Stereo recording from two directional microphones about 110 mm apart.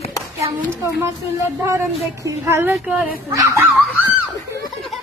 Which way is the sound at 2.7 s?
10° right (ahead or behind).